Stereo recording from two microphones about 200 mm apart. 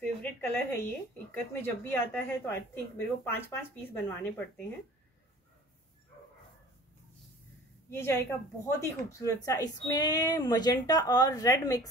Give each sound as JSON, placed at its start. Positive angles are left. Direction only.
{"t": 0.2, "sound": "a sound", "side_deg": 10}
{"t": 1.3, "sound": "speech", "side_deg": 10}
{"t": 7.9, "sound": "speech", "side_deg": 15}